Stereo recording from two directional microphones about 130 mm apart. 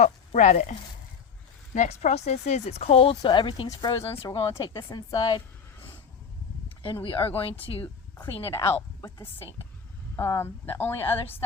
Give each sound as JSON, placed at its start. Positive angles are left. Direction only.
{"t": 0.0, "sound": "speech", "side_deg": 60}
{"t": 3.2, "sound": "a woman's voice", "side_deg": 35}
{"t": 6.8, "sound": "a woman's voice", "side_deg": 40}
{"t": 8.6, "sound": "a woman's voice", "side_deg": 20}